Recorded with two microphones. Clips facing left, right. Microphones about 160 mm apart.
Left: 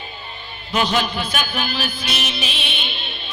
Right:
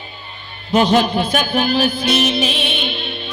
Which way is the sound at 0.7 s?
45° right (ahead or behind).